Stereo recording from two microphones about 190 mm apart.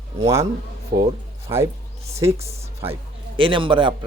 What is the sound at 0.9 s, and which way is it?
Speech, 55° right (ahead or behind).